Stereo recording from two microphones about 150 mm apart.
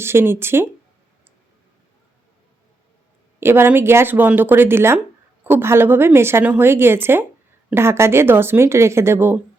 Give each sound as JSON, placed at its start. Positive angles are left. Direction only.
{"t": 0.0, "sound": "a woman's voice", "side_deg": -15}
{"t": 3.4, "sound": "a woman's voice", "side_deg": -15}